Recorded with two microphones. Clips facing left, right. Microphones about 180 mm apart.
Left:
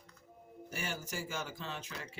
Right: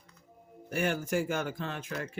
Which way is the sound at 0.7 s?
60° right (ahead or behind).